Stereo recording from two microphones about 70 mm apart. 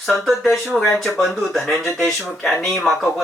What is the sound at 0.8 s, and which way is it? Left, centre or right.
Speech, centre.